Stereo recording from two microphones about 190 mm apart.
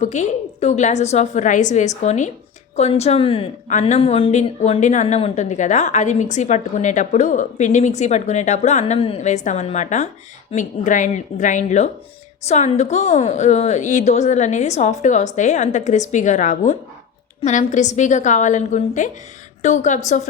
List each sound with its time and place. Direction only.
0.0 s a woman's voice: 40° left (ahead or behind)